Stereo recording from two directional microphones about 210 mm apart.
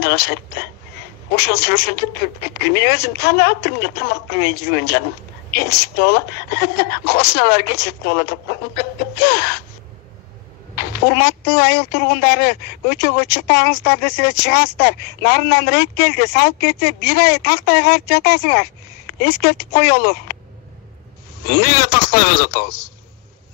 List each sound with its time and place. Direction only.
0.0 s speech: 50° left (ahead or behind)
1.3 s a woman's voice: 50° left (ahead or behind)
11.1 s a woman's voice: 50° left (ahead or behind)
21.5 s a woman's voice: 50° left (ahead or behind)